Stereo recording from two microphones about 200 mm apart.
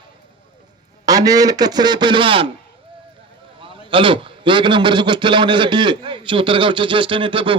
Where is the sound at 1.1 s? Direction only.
20° right (ahead or behind).